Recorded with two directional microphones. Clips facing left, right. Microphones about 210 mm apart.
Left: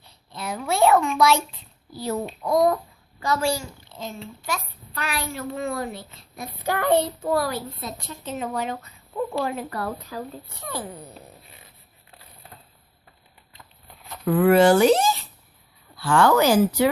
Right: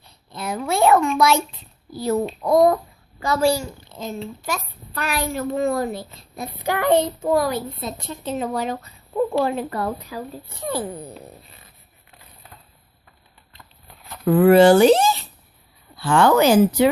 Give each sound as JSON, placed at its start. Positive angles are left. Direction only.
{"t": 0.3, "sound": "a sound", "side_deg": -50}
{"t": 2.2, "sound": "a child's voice", "side_deg": -60}
{"t": 3.2, "sound": "a woman's voice", "side_deg": -30}
{"t": 6.6, "sound": "a woman's voice", "side_deg": -15}
{"t": 14.3, "sound": "a woman's voice", "side_deg": -30}